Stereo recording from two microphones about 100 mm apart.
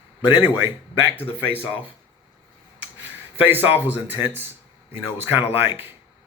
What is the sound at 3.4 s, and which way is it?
Speech, 20° right (ahead or behind).